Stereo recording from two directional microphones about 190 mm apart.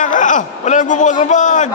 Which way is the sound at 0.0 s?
45° left (ahead or behind).